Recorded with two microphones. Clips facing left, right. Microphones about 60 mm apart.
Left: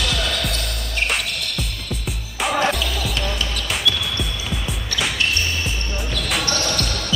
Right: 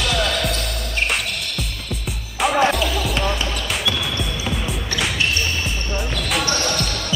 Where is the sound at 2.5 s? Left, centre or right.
Centre.